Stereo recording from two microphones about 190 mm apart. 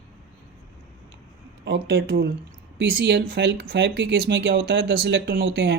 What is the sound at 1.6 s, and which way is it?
Speech, 60° right (ahead or behind).